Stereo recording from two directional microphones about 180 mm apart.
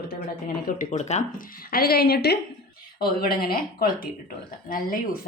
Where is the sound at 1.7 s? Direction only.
55° left (ahead or behind).